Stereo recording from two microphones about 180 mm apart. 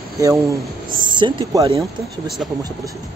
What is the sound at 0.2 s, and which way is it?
Speech, 15° right (ahead or behind).